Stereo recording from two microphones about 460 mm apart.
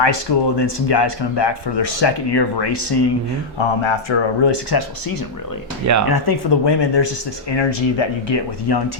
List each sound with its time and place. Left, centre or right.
0.0 s speech: left
3.6 s speech: left
4.4 s speech: left
7.5 s speech: left